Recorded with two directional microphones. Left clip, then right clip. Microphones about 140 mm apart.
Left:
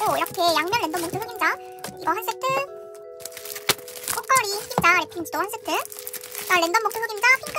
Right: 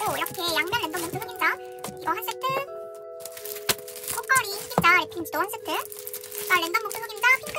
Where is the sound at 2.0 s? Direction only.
15° left (ahead or behind).